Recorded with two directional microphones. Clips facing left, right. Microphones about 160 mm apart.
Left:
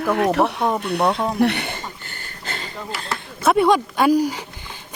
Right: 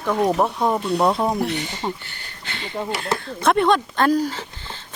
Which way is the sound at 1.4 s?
65° left (ahead or behind).